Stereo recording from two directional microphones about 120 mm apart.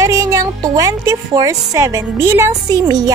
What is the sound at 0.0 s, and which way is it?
A woman's voice, 25° right (ahead or behind).